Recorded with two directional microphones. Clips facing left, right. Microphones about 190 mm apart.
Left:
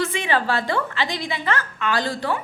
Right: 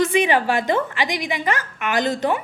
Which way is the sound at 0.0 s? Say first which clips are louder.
Right 5 dB; 15° right (ahead or behind).